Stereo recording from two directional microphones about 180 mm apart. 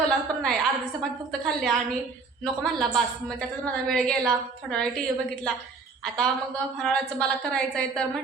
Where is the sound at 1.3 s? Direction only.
Centre (ahead or behind).